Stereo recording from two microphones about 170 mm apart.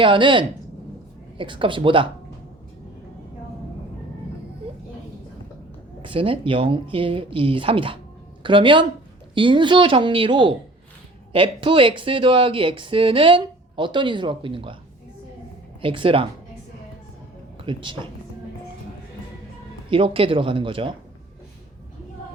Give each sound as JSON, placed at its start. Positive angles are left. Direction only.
{"t": 0.0, "sound": "speech", "side_deg": -30}
{"t": 6.0, "sound": "speech", "side_deg": -30}
{"t": 15.8, "sound": "speech", "side_deg": -30}
{"t": 17.7, "sound": "speech", "side_deg": -30}
{"t": 19.9, "sound": "speech", "side_deg": -30}